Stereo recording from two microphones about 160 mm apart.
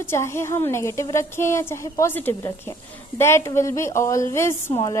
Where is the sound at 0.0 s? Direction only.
15° left (ahead or behind).